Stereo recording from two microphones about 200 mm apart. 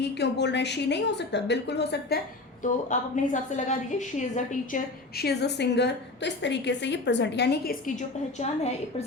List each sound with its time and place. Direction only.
0.0 s a woman's voice: 55° left (ahead or behind)
2.6 s a woman's voice: 40° left (ahead or behind)
4.7 s a woman's voice: 50° left (ahead or behind); by 9.0 s 35° left (ahead or behind)